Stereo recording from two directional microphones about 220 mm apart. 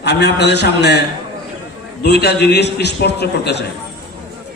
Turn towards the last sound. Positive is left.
turn(degrees=50)  # may be behind; listen again after turning